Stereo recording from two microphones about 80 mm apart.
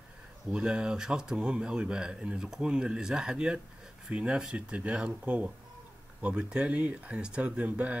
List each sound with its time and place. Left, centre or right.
0.5 s speech: centre